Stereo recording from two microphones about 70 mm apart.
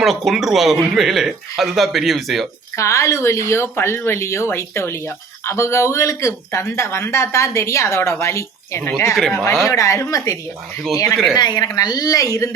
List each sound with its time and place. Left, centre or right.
0.0 s speech: centre
2.7 s a woman's voice: left
9.6 s speech: left
11.3 s a woman's voice: left
11.8 s a woman's voice: left